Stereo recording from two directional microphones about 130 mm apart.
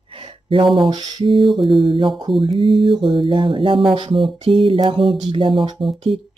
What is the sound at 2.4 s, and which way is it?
Speech, 40° right (ahead or behind).